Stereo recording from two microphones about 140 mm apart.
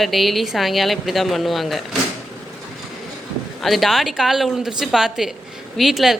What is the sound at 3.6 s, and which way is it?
A woman's voice, centre (ahead or behind).